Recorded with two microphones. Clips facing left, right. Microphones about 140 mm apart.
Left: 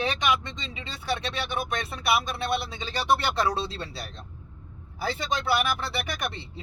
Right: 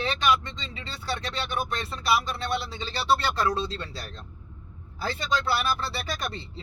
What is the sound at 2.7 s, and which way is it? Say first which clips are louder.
Speech: right 2 dB; 15° left (ahead or behind).